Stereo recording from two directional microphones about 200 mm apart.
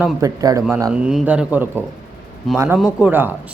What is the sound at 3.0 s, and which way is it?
Speech, 10° right (ahead or behind).